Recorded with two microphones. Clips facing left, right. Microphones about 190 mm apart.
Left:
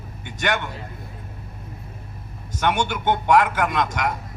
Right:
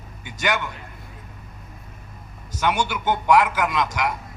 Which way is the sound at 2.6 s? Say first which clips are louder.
Left 1 dB; 50° left (ahead or behind).